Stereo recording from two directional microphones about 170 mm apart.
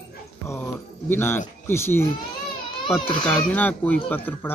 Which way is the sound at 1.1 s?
15° left (ahead or behind).